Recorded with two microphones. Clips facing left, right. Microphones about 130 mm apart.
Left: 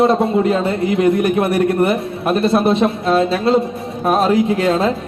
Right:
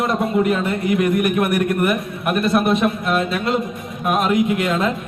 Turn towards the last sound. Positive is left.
turn(degrees=30)  # may be behind; listen again after turning